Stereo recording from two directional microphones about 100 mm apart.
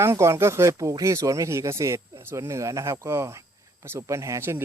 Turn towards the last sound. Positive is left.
turn(degrees=-25)  # may be behind; listen again after turning